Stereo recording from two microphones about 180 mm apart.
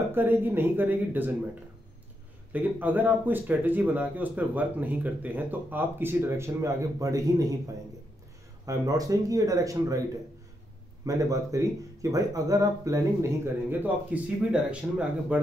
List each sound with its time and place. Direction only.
0.1 s speech: 10° right (ahead or behind)
11.1 s speech: 20° right (ahead or behind)